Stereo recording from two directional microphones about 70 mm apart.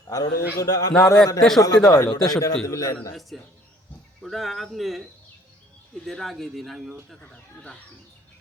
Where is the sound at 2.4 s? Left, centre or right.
Left.